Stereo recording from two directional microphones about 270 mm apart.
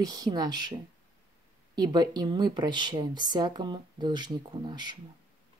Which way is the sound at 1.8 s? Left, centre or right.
Centre.